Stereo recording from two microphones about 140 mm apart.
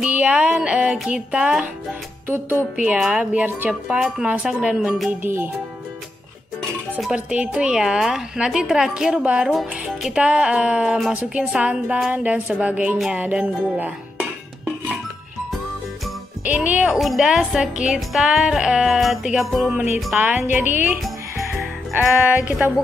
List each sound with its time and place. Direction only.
0.0 s a woman's voice: 10° right (ahead or behind)
5.2 s a woman's voice: 15° right (ahead or behind)
7.2 s a woman's voice: 5° right (ahead or behind)
16.4 s a woman's voice: 10° right (ahead or behind)
20.2 s a woman's voice: 10° right (ahead or behind)